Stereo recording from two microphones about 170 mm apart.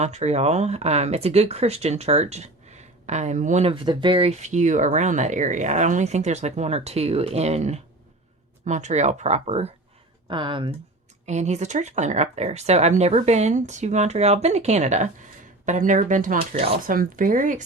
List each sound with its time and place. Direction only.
0.0 s speech: 40° right (ahead or behind)
10.2 s speech: 30° right (ahead or behind)
11.3 s speech: 40° right (ahead or behind)
16.6 s speech: 35° right (ahead or behind)
16.8 s speech: 55° right (ahead or behind)